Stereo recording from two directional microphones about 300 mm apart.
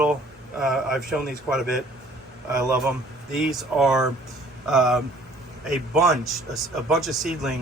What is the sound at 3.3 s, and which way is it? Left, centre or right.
Speech, centre.